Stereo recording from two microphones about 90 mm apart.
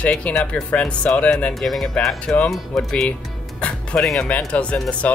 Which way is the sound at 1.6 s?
Centre (ahead or behind).